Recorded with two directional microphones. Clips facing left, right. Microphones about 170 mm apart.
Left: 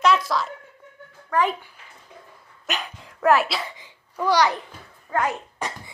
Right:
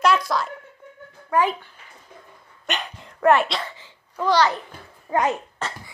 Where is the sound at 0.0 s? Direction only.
Centre (ahead or behind).